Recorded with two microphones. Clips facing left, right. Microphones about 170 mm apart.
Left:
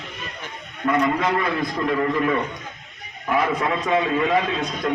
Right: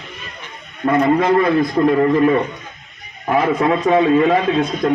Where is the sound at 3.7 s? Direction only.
40° right (ahead or behind).